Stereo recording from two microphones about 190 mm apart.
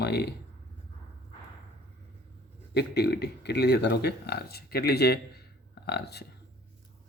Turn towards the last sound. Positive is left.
turn(degrees=60)  # may be behind; listen again after turning